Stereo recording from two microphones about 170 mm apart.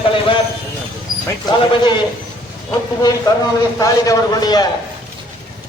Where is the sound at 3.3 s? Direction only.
25° left (ahead or behind).